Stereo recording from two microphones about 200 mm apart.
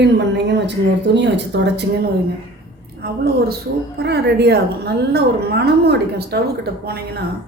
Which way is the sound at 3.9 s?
55° right (ahead or behind).